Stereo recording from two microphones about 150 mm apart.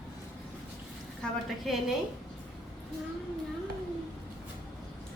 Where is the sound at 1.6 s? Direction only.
Centre (ahead or behind).